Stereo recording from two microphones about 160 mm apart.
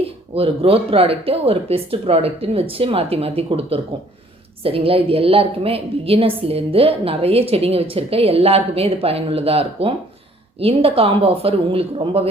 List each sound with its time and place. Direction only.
0.3 s a woman's voice: 35° right (ahead or behind)